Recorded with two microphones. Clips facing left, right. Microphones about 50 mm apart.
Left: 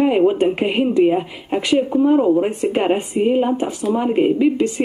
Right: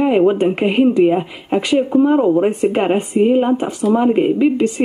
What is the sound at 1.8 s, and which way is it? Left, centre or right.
Speech, right.